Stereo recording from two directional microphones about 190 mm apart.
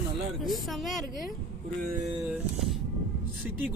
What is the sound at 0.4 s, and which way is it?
Speech, centre (ahead or behind).